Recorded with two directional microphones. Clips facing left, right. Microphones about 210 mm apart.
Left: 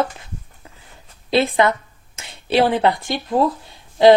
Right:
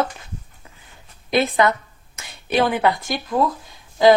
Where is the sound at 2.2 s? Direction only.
30° left (ahead or behind).